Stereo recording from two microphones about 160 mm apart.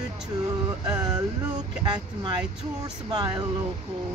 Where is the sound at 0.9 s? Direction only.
25° right (ahead or behind).